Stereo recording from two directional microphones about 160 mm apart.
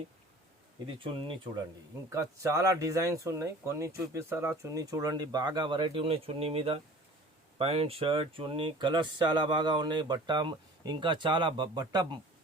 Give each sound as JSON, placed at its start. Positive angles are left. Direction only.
{"t": 2.1, "sound": "speech", "side_deg": -20}